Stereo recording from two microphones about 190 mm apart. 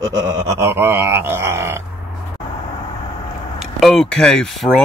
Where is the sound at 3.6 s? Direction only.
Centre (ahead or behind).